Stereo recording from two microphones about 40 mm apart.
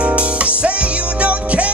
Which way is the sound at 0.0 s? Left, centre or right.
Right.